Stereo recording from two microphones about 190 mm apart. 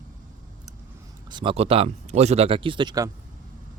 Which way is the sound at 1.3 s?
25° right (ahead or behind).